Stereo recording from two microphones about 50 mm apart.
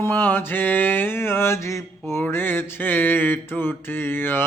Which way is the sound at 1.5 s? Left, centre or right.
Left.